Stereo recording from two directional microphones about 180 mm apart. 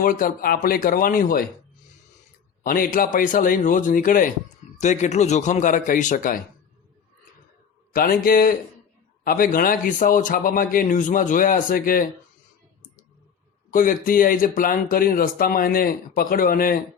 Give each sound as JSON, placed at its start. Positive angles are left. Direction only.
{"t": 0.0, "sound": "speech", "side_deg": 50}
{"t": 2.6, "sound": "speech", "side_deg": 50}
{"t": 7.9, "sound": "speech", "side_deg": 55}
{"t": 13.7, "sound": "speech", "side_deg": 50}